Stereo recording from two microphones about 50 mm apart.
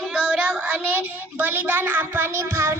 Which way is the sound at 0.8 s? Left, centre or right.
Right.